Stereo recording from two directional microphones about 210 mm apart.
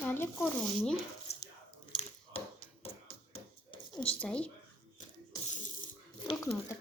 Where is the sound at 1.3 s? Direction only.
30° left (ahead or behind).